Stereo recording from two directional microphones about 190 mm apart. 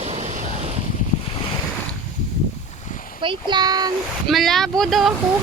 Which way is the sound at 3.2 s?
25° right (ahead or behind).